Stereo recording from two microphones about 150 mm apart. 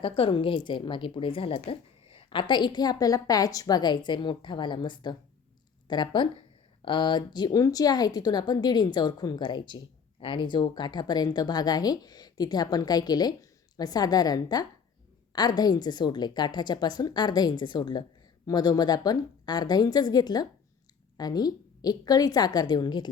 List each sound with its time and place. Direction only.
0.0 s a woman's voice: 35° left (ahead or behind)